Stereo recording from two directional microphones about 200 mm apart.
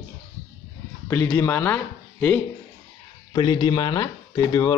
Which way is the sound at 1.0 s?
15° left (ahead or behind).